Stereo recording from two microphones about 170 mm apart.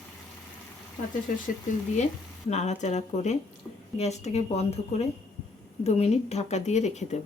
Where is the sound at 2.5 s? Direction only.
40° left (ahead or behind).